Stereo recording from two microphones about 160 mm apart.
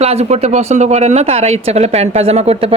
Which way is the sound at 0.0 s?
40° right (ahead or behind).